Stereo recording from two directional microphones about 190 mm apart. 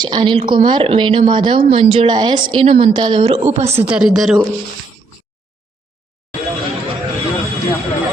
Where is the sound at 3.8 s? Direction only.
5° right (ahead or behind).